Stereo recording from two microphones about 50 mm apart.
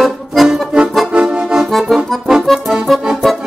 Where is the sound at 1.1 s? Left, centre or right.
Centre.